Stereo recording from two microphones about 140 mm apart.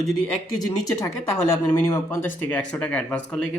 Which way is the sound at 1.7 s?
25° left (ahead or behind).